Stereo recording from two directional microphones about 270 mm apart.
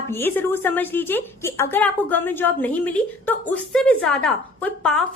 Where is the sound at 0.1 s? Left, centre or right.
Centre.